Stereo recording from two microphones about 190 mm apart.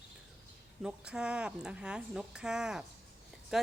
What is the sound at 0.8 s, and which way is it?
A woman's voice, 5° right (ahead or behind).